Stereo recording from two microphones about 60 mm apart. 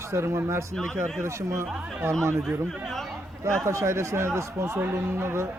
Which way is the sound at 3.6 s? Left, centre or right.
Right.